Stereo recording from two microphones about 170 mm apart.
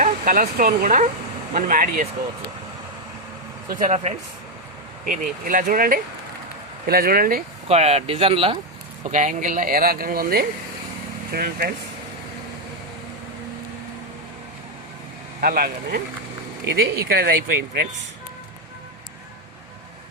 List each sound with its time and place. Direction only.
0.0 s speech: 55° right (ahead or behind)
3.7 s speech: 50° right (ahead or behind)
7.7 s speech: 40° right (ahead or behind)
9.0 s speech: 45° right (ahead or behind); by 11.7 s 65° right (ahead or behind)
15.4 s speech: 60° right (ahead or behind)